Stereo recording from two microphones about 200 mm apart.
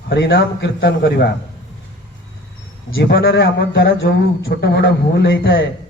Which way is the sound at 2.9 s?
60° left (ahead or behind).